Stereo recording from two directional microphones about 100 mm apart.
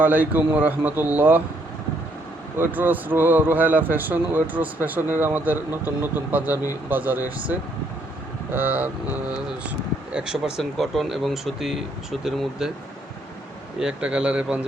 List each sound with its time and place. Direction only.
0.0 s a man's voice: 15° right (ahead or behind)
2.6 s speech: 20° right (ahead or behind)
8.5 s speech: 20° right (ahead or behind)
13.7 s a man's voice: 10° right (ahead or behind)